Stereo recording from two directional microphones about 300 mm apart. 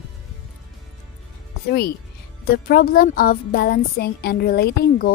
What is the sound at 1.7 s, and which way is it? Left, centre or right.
Speech, left.